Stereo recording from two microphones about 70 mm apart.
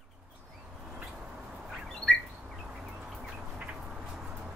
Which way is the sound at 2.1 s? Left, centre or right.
Centre.